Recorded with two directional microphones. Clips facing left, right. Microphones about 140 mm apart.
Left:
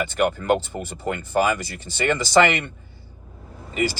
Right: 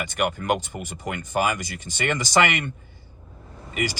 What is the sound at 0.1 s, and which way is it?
Speech, 15° right (ahead or behind).